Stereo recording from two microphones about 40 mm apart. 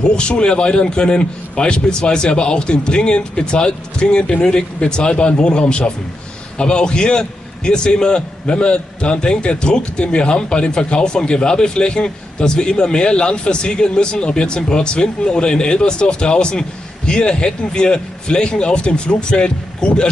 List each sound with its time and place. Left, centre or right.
0.0 s a man's voice: left